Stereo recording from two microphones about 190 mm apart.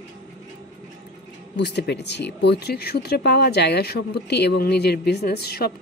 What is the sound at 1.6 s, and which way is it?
Speech, 60° left (ahead or behind).